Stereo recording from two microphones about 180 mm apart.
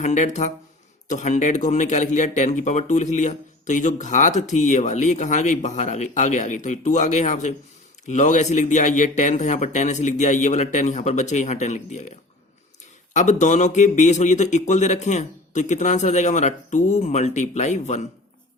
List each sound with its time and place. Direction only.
0.0 s speech: 40° left (ahead or behind)
13.1 s speech: 40° left (ahead or behind)